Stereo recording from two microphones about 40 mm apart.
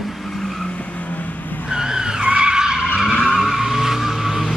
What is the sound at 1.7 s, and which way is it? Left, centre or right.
Skidding, centre.